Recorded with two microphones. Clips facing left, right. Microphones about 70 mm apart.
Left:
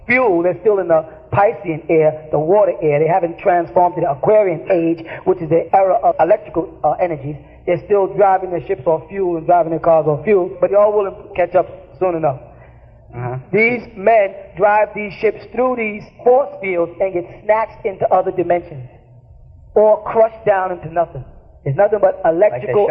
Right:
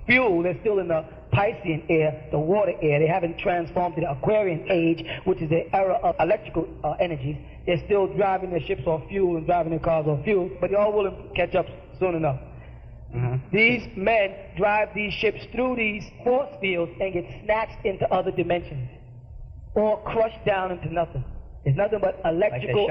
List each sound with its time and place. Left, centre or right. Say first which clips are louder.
0.0 s a man's voice: left 7 dB; left
7.6 s a man's voice: left 7 dB; left